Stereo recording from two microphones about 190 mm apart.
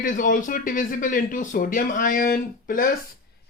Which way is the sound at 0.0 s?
45° left (ahead or behind).